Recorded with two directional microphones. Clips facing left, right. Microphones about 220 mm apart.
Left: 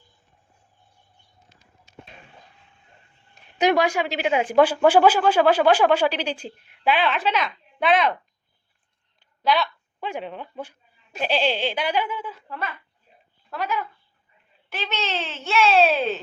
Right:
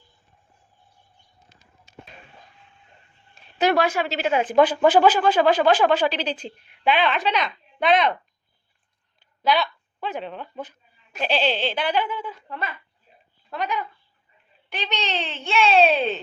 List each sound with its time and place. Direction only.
3.3 s a woman's voice: 15° left (ahead or behind)
9.4 s speech: centre (ahead or behind)
10.0 s a woman's voice: 10° left (ahead or behind)